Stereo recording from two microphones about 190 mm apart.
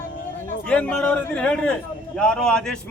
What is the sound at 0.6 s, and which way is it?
A man's voice, 5° left (ahead or behind).